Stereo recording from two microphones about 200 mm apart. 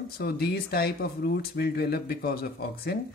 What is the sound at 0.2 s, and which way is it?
Speech, 55° left (ahead or behind).